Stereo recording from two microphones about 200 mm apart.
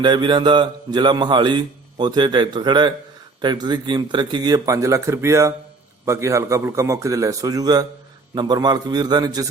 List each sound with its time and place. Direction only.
0.0 s a man's voice: 25° right (ahead or behind)